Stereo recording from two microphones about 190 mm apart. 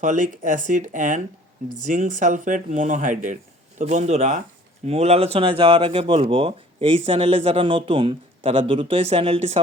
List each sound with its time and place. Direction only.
0.0 s speech: 40° right (ahead or behind)